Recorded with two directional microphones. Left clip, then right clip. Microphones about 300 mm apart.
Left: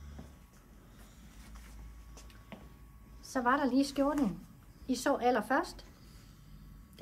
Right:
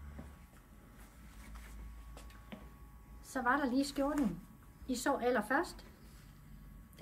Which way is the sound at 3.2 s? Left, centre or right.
Centre.